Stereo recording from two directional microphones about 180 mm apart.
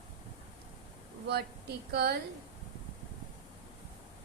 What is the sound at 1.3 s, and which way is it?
Speech, 65° right (ahead or behind).